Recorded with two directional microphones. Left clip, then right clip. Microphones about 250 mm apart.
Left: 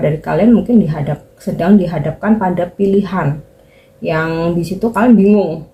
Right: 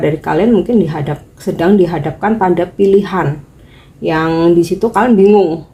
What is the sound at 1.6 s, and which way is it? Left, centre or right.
Speech, right.